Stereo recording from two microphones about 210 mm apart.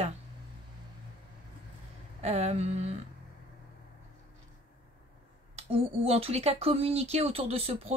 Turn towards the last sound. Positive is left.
turn(degrees=-30)  # may be behind; listen again after turning